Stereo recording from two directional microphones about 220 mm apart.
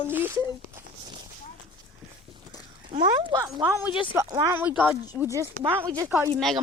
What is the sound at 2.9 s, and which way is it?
Speech, 20° right (ahead or behind).